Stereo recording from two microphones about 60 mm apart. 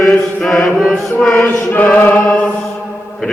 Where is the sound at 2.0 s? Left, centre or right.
Left.